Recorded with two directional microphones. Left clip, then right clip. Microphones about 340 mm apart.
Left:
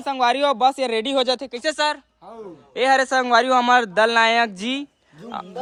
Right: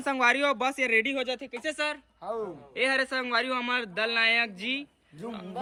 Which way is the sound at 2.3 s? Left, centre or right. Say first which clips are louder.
Right 6 dB; centre.